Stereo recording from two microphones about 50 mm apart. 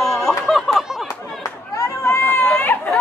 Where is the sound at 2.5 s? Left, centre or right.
Left.